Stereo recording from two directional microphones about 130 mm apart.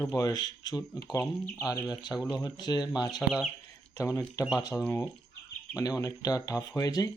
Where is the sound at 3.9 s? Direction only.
25° left (ahead or behind).